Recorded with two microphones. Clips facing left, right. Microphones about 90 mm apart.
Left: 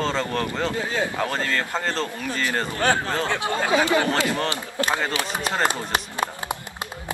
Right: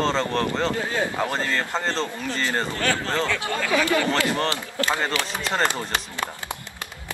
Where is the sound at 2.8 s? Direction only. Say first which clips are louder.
Left 4 dB; 20° left (ahead or behind).